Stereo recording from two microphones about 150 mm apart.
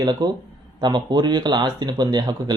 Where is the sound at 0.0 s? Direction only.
30° right (ahead or behind).